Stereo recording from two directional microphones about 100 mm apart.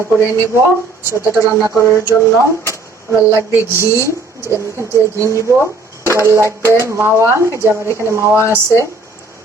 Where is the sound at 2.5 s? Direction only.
30° left (ahead or behind).